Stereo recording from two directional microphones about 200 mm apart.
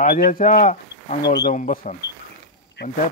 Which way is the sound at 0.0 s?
40° left (ahead or behind).